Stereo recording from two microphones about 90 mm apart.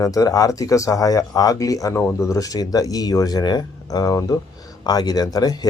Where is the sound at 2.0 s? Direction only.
30° left (ahead or behind); by 5.6 s 45° left (ahead or behind).